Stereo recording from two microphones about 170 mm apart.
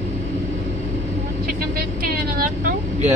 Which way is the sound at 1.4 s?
60° right (ahead or behind).